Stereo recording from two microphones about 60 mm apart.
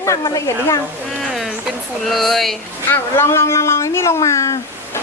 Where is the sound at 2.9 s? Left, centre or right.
Left.